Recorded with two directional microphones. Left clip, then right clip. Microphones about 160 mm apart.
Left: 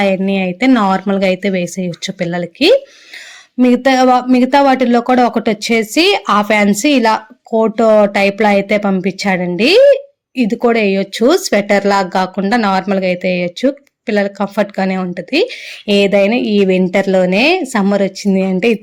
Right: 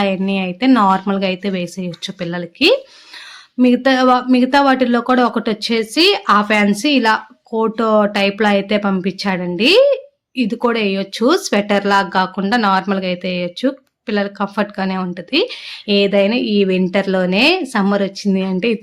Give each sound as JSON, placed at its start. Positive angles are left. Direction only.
{"t": 0.0, "sound": "speech", "side_deg": 20}